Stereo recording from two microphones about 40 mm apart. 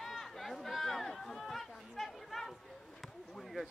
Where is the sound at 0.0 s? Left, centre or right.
Centre.